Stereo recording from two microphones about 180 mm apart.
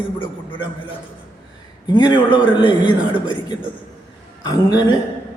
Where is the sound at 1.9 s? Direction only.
25° left (ahead or behind).